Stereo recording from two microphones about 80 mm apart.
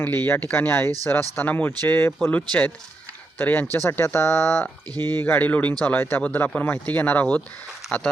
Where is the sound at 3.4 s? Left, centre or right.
Left.